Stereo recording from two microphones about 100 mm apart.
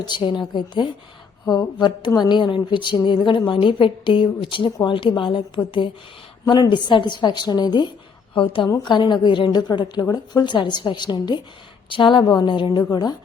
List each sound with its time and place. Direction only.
0.0 s a woman's voice: 50° left (ahead or behind)
6.4 s a woman's voice: 50° left (ahead or behind)
8.4 s a woman's voice: 55° left (ahead or behind)